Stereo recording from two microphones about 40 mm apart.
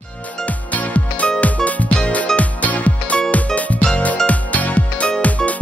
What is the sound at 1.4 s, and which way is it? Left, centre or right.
Music, left.